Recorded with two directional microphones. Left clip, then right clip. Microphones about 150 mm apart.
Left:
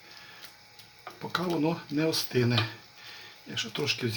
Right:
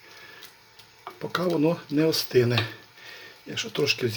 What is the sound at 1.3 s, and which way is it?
Speech, 20° right (ahead or behind).